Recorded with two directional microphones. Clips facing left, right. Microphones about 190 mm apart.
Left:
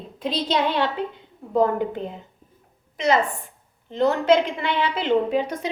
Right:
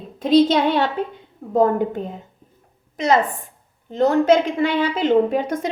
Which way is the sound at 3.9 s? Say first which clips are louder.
Right 3 dB; 45° right (ahead or behind).